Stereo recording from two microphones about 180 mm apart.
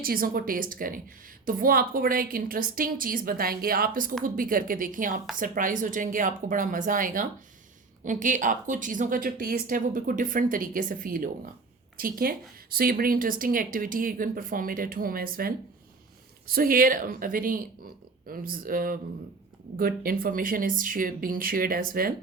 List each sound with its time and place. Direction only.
0.0 s speech: 55° right (ahead or behind)